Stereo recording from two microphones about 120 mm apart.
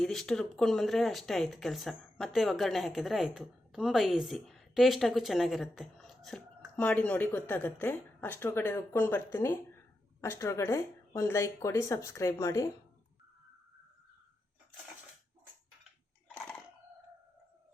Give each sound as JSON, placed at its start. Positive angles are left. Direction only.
{"t": 0.0, "sound": "speech", "side_deg": 5}